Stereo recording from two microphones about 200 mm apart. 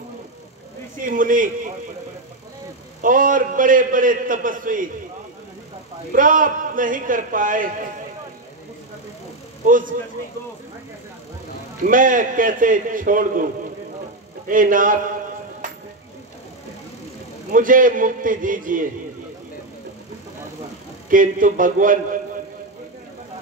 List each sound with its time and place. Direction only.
1.0 s a man's voice: 40° right (ahead or behind)
3.0 s a man's voice: 40° right (ahead or behind)
6.1 s a man's voice: 40° right (ahead or behind)
9.7 s a man's voice: 40° right (ahead or behind)
11.8 s a man's voice: 40° right (ahead or behind)
14.5 s a man's voice: 40° right (ahead or behind)
17.5 s a man's voice: 40° right (ahead or behind)
21.1 s a man's voice: 40° right (ahead or behind)